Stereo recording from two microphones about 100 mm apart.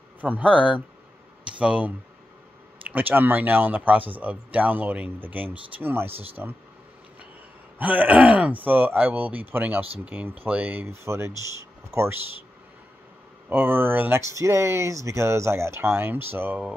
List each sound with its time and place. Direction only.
0.2 s speech: 15° right (ahead or behind)
7.8 s speech: 15° right (ahead or behind)
13.5 s speech: 20° right (ahead or behind)
14.2 s speech: 30° right (ahead or behind)